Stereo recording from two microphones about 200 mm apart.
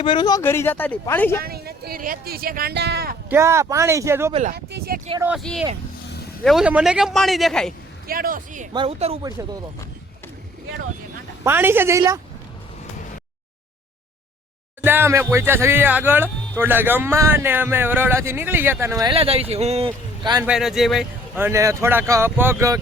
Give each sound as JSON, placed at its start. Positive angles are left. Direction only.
{"t": 0.0, "sound": "speech", "side_deg": 25}
{"t": 1.4, "sound": "speech", "side_deg": -50}
{"t": 3.2, "sound": "speech", "side_deg": -15}
{"t": 4.3, "sound": "speech", "side_deg": -35}
{"t": 4.5, "sound": "speech", "side_deg": -50}
{"t": 5.2, "sound": "a man's voice", "side_deg": 0}
{"t": 8.0, "sound": "speech", "side_deg": -45}
{"t": 8.7, "sound": "a man's voice", "side_deg": -25}
{"t": 9.2, "sound": "speech", "side_deg": -15}
{"t": 11.4, "sound": "speech", "side_deg": -10}
{"t": 14.8, "sound": "speech", "side_deg": -10}
{"t": 19.1, "sound": "a man's voice", "side_deg": -30}
{"t": 20.4, "sound": "a man's voice", "side_deg": -5}
{"t": 21.3, "sound": "speech", "side_deg": -15}